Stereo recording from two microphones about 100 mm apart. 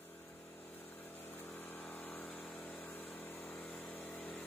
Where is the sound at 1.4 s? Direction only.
20° left (ahead or behind).